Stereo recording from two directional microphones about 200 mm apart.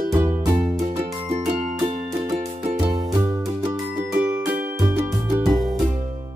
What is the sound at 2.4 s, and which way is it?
Music, 30° right (ahead or behind).